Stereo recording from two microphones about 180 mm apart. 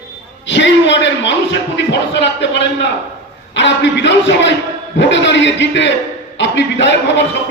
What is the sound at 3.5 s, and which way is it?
A man's voice, 75° left (ahead or behind).